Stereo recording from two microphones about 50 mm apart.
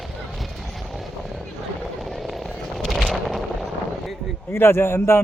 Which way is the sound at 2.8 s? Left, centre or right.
Centre.